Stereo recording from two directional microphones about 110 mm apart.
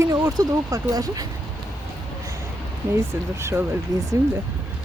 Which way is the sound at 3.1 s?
25° right (ahead or behind).